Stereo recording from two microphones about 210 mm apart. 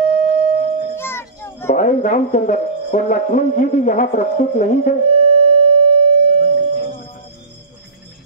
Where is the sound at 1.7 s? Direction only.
35° left (ahead or behind).